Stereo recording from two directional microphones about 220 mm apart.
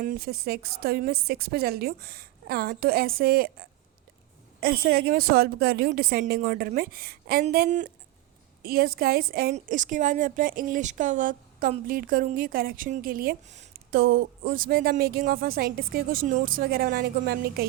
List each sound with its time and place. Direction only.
0.0 s a woman's voice: 40° right (ahead or behind)